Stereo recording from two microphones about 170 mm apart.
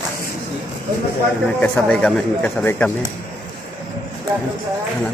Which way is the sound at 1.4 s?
10° left (ahead or behind).